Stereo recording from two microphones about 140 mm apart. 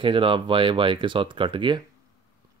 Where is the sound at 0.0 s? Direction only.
40° right (ahead or behind).